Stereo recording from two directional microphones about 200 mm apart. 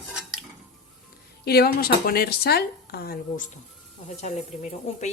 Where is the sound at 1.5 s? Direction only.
50° left (ahead or behind).